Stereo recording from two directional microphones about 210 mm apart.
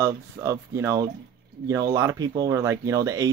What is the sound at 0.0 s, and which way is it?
Speech, 15° right (ahead or behind).